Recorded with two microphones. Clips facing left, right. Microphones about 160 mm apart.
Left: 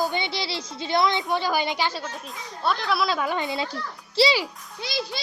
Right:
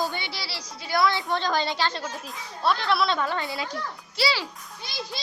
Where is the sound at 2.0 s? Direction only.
Centre (ahead or behind).